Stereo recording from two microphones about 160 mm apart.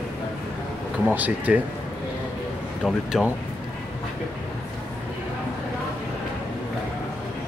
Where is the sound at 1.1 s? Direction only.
10° right (ahead or behind).